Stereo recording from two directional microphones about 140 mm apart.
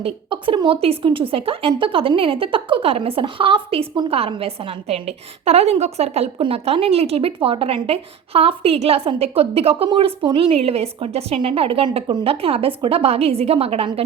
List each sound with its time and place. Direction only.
0.0 s a woman's voice: 35° right (ahead or behind)